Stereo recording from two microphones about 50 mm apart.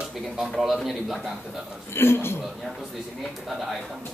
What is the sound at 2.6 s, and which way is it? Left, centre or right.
A man's voice, centre.